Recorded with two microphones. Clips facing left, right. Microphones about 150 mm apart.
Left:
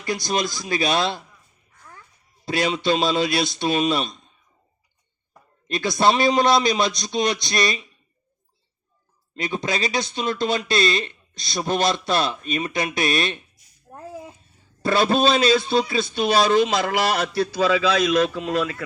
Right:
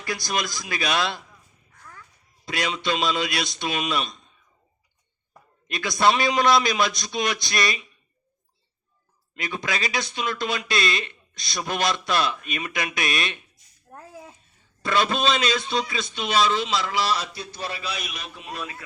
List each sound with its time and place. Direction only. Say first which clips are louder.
0.0 s speech: left 4 dB; 25° left (ahead or behind)
2.4 s a man's voice: left 5 dB; 30° left (ahead or behind)
5.6 s speech: left 2 dB; 30° left (ahead or behind)
9.3 s speech: left 4 dB; 30° left (ahead or behind)
13.9 s a sound: left 2 dB; 25° left (ahead or behind)
14.8 s a man's voice: left 5 dB; 35° left (ahead or behind); by 18.8 s 90° left